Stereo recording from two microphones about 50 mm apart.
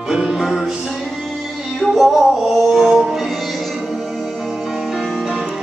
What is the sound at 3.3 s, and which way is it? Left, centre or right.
Music, centre.